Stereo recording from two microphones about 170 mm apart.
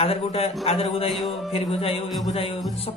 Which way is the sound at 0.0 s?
35° left (ahead or behind).